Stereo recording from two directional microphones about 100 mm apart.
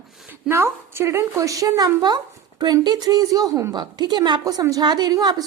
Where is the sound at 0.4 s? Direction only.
25° right (ahead or behind).